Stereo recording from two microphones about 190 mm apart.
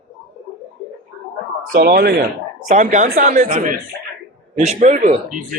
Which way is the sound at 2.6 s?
40° right (ahead or behind).